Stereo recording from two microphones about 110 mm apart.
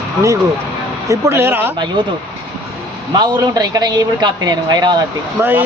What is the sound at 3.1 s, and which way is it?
A man's voice, 35° right (ahead or behind).